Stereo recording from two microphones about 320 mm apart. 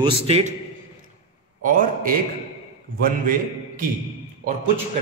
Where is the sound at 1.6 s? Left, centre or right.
Right.